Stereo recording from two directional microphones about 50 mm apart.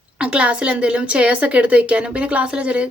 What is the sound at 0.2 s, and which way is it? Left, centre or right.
Speech, right.